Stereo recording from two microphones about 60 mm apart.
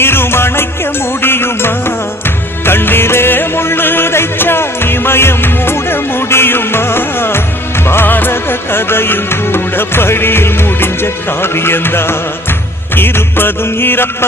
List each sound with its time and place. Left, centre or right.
0.0 s music: left